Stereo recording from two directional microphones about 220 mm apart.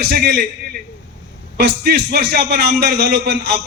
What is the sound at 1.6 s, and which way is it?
A man's voice, 45° right (ahead or behind).